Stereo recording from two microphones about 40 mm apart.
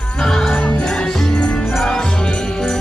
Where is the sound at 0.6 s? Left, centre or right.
Left.